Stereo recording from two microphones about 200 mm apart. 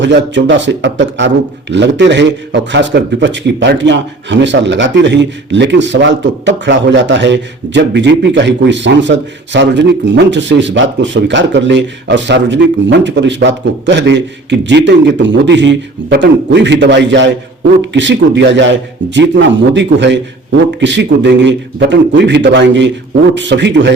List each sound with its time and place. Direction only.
0.0 s a man's voice: 65° right (ahead or behind)